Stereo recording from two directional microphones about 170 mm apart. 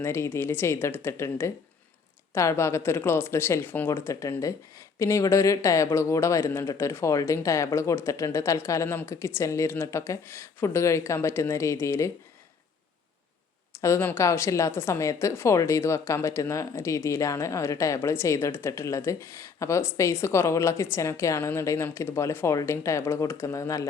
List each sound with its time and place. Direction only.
0.0 s speech: 15° left (ahead or behind)
13.8 s speech: 15° left (ahead or behind)